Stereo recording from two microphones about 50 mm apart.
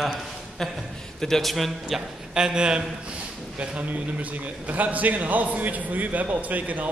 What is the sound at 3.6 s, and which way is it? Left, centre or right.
A man's voice, right.